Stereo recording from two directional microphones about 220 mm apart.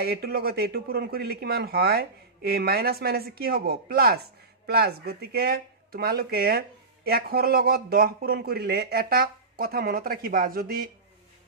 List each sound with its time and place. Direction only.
0.0 s speech: 45° right (ahead or behind)